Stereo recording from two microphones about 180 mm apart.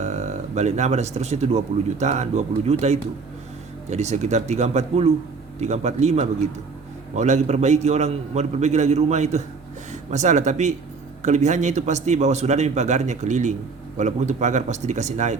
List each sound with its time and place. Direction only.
0.0 s a man's voice: 40° right (ahead or behind)